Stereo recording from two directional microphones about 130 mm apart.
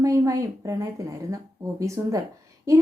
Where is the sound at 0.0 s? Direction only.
25° right (ahead or behind).